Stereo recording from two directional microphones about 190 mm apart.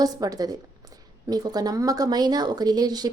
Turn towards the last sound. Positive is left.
turn(degrees=-20)  # may be behind; listen again after turning